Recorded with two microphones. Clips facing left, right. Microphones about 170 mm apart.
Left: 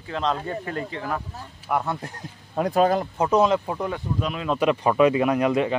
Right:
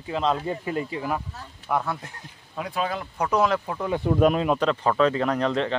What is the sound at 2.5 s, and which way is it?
Speech, 45° left (ahead or behind).